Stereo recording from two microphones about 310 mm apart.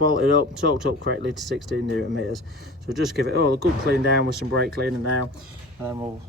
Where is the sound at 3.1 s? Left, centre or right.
Right.